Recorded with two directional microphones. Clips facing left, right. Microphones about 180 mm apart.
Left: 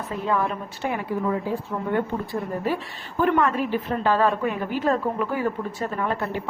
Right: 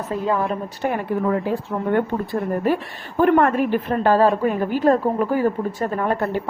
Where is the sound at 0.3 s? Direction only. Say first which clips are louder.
Right 2 dB; 35° right (ahead or behind).